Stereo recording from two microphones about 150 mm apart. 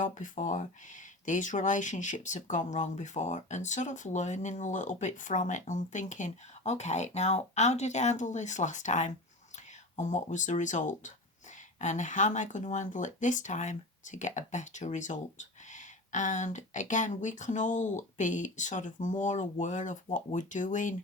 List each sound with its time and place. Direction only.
0.0 s speech: 55° left (ahead or behind)